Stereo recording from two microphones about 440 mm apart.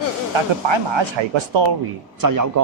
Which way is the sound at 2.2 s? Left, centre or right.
Right.